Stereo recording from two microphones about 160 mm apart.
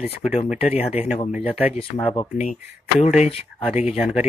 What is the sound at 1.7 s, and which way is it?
Speech, 35° left (ahead or behind).